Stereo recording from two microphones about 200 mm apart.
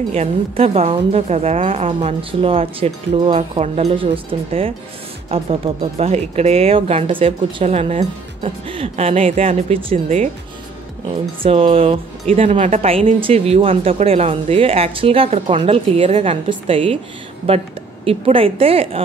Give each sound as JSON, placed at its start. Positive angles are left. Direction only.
{"t": 0.1, "sound": "speech", "side_deg": -30}
{"t": 11.4, "sound": "speech", "side_deg": -25}